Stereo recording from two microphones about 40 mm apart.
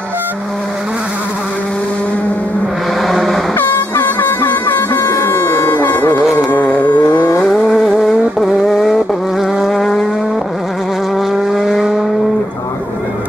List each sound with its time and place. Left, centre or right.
3.0 s vehicle: centre
3.5 s air horn: left
5.9 s music: left
6.3 s carnatic music: left
6.9 s vehicle: left
7.4 s vehicle: centre
11.1 s vehicle: centre